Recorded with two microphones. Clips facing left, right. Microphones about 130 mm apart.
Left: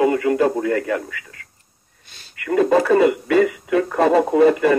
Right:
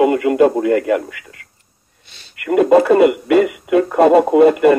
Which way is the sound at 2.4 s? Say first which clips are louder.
Right 5 dB; 20° right (ahead or behind).